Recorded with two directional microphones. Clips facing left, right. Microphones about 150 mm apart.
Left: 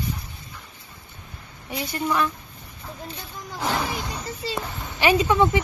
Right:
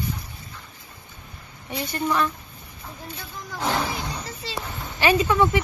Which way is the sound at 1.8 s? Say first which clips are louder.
Even; 5° left (ahead or behind).